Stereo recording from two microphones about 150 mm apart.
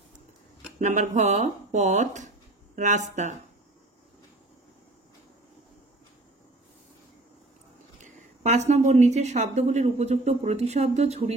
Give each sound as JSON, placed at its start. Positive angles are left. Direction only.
{"t": 0.8, "sound": "speech", "side_deg": -50}
{"t": 8.0, "sound": "a woman's voice", "side_deg": -55}